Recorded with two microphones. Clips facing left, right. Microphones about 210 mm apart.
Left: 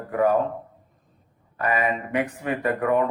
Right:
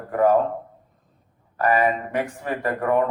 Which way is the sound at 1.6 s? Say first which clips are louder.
Right 4 dB; 40° right (ahead or behind).